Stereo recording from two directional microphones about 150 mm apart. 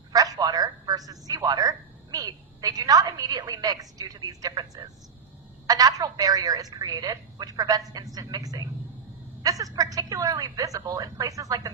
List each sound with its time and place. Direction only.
0.1 s a woman's voice: 25° right (ahead or behind)